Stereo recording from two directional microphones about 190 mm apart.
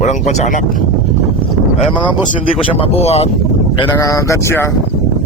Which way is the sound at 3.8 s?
15° left (ahead or behind).